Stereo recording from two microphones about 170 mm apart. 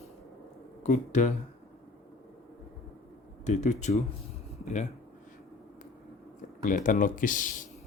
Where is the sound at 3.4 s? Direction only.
45° left (ahead or behind).